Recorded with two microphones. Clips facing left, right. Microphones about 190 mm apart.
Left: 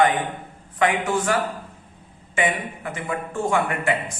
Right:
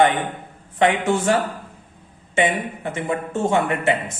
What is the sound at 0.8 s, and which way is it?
A man's voice, 25° right (ahead or behind).